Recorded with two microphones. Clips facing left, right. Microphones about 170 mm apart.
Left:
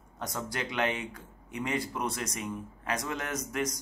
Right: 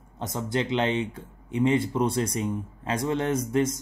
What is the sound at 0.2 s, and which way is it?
Speech, 25° right (ahead or behind).